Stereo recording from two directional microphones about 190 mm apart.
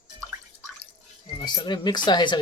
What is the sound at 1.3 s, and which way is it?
Speech, 25° left (ahead or behind).